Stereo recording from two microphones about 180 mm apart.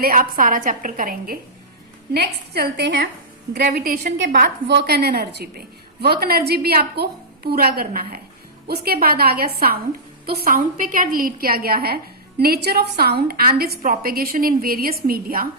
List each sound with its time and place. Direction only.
0.0 s a woman's voice: 50° right (ahead or behind)
2.1 s a woman's voice: 65° right (ahead or behind)
4.7 s a woman's voice: 65° right (ahead or behind)